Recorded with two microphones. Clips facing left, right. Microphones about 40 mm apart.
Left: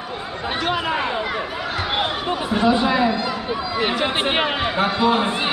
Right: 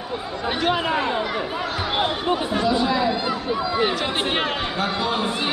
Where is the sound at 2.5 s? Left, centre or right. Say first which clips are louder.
Left 6 dB; left.